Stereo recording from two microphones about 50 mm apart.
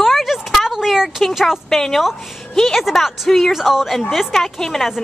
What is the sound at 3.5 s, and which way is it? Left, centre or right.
A woman's voice, centre.